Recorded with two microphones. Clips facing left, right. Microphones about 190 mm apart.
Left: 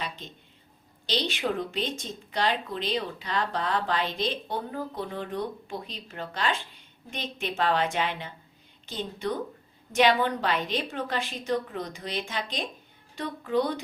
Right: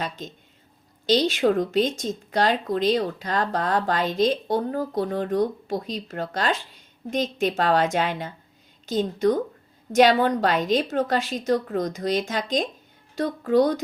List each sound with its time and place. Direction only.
0.2 s a woman's voice: 45° right (ahead or behind)